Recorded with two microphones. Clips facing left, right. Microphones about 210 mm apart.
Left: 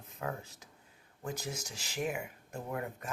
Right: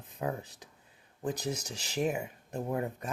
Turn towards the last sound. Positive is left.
turn(degrees=-25)  # may be behind; listen again after turning